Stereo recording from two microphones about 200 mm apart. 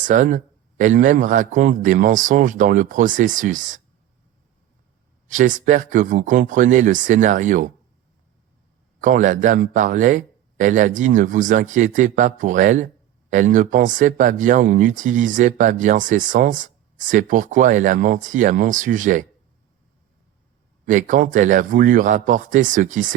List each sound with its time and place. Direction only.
0.0 s speech: 40° right (ahead or behind)
5.3 s speech: 40° right (ahead or behind)
9.0 s speech: 40° right (ahead or behind)
20.8 s speech: 40° right (ahead or behind)